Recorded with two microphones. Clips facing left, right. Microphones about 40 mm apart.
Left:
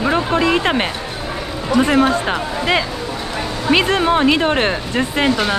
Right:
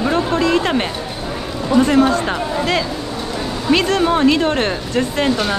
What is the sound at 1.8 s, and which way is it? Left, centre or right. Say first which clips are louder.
Speech: right 1 dB; centre.